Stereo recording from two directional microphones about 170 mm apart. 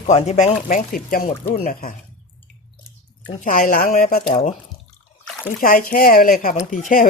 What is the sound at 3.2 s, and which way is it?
Speech, 50° left (ahead or behind).